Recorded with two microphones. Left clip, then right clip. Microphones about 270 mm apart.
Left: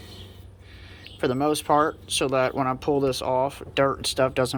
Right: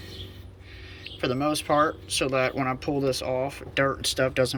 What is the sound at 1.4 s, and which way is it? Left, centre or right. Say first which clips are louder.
Speech: left 2 dB; centre.